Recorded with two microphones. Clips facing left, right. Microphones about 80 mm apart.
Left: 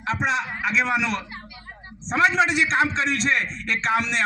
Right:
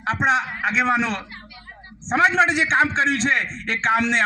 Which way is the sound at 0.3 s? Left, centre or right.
Right.